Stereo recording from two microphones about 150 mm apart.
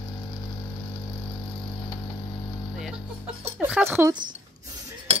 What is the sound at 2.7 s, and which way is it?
Music, centre (ahead or behind).